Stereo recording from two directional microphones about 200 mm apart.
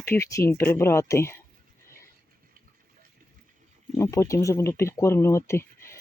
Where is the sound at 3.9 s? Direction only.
15° left (ahead or behind).